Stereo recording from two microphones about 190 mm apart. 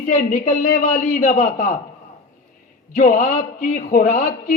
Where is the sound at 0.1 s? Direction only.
40° left (ahead or behind).